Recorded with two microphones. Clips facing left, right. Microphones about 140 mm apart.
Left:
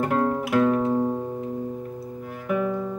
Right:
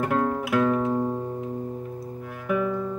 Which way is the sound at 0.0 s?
5° left (ahead or behind).